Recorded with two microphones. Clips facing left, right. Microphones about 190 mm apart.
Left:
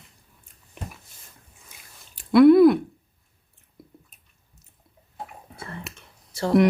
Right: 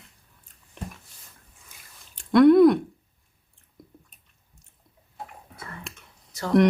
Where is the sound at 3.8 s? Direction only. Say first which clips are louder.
Left 1 dB; 5° left (ahead or behind).